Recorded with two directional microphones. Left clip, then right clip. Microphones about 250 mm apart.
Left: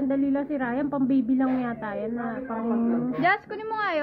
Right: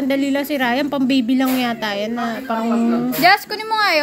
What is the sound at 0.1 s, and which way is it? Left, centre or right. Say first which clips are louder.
A woman's voice: right 9 dB; right.